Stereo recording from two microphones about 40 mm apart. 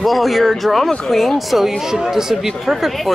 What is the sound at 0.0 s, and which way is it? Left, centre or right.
Speech, centre.